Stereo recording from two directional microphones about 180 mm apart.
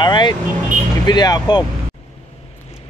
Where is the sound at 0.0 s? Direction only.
25° left (ahead or behind).